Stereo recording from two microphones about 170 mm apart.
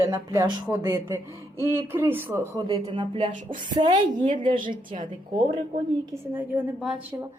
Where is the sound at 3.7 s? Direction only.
25° right (ahead or behind).